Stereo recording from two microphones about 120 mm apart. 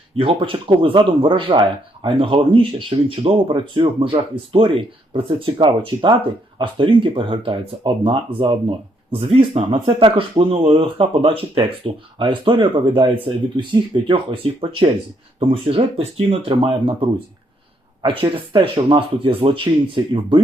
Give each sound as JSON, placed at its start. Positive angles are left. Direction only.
{"t": 0.2, "sound": "speech", "side_deg": -45}